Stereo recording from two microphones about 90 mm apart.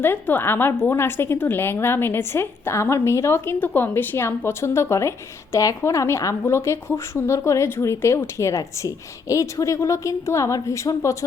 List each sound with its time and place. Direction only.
0.0 s a woman's voice: 25° left (ahead or behind)